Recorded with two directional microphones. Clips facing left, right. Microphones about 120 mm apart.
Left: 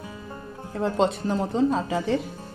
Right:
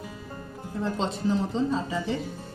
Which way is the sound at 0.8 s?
60° left (ahead or behind).